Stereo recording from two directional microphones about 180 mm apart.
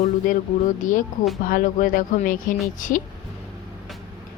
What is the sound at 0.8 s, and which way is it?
Speech, 45° left (ahead or behind).